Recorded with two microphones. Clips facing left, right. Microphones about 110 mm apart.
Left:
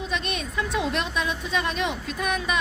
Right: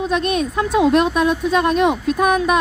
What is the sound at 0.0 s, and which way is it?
Speech, 50° right (ahead or behind).